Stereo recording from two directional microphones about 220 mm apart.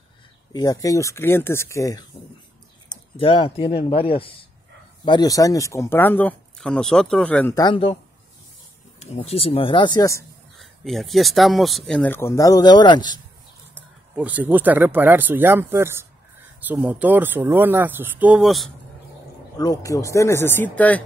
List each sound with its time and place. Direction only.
0.5 s speech: 15° left (ahead or behind)
9.0 s speech: 30° left (ahead or behind)
10.6 s speech: centre (ahead or behind); by 13.2 s 20° left (ahead or behind)
14.1 s speech: 5° right (ahead or behind)
19.5 s speech: 15° left (ahead or behind)